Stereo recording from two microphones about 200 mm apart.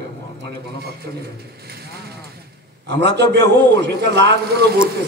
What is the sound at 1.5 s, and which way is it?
A man's voice, 55° right (ahead or behind).